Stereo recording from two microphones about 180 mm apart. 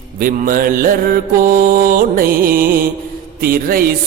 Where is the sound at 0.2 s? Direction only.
50° right (ahead or behind).